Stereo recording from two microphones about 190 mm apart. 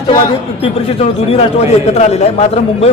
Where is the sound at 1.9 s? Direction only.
35° left (ahead or behind).